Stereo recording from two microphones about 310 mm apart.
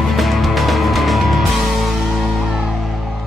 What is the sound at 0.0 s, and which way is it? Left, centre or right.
Music, centre.